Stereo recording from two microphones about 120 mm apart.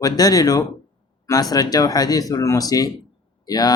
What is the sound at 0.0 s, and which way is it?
Speech, 30° left (ahead or behind).